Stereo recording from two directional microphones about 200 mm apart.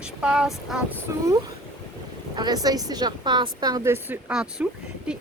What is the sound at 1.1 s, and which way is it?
Speech, 15° right (ahead or behind).